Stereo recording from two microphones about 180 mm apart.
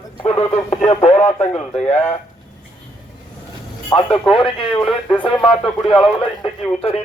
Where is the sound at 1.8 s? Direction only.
35° left (ahead or behind).